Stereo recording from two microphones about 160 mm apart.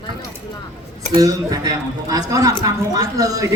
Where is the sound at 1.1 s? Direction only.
20° right (ahead or behind).